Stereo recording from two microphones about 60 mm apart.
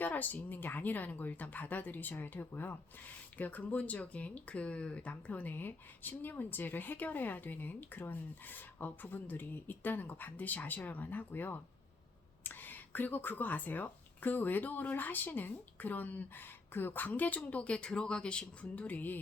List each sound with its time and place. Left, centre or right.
0.0 s speech: left